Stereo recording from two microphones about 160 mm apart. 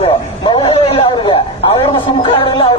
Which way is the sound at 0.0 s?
35° left (ahead or behind).